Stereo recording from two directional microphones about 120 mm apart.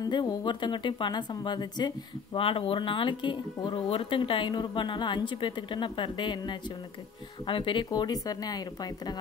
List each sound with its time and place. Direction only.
0.0 s speech: 35° left (ahead or behind)